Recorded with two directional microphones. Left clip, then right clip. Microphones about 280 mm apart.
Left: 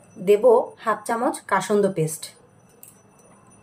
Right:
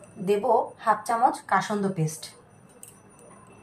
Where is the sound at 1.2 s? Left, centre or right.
Left.